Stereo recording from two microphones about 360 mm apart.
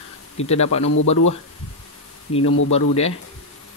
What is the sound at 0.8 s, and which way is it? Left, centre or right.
Speech, left.